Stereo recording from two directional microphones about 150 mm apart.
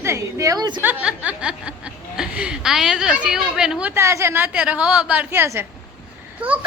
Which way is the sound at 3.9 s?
20° right (ahead or behind).